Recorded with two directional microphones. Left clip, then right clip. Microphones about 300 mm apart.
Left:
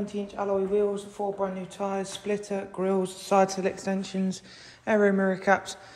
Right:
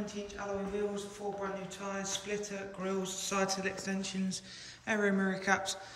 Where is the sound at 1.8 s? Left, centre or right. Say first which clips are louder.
Left 10 dB; centre.